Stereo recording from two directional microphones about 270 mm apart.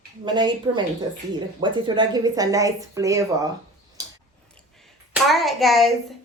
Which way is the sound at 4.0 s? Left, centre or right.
Centre.